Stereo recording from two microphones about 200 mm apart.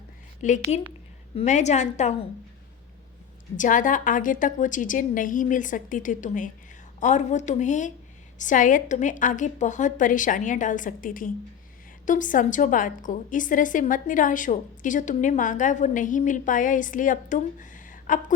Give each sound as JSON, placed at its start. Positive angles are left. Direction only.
{"t": 0.4, "sound": "a woman's voice", "side_deg": 35}
{"t": 3.6, "sound": "a woman's voice", "side_deg": 40}